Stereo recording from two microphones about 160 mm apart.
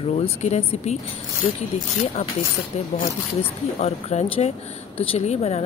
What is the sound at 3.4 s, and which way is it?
Speech, 40° left (ahead or behind).